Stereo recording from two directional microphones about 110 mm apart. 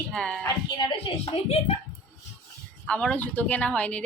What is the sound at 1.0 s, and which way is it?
Speech, 65° left (ahead or behind).